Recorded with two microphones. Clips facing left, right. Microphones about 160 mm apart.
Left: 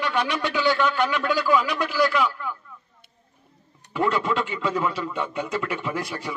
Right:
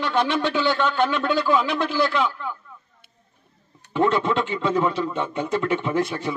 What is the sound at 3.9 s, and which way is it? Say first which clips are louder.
A man's voice: right 3 dB; 25° right (ahead or behind).